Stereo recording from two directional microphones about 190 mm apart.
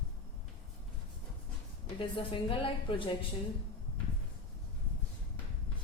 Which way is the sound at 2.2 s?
25° left (ahead or behind).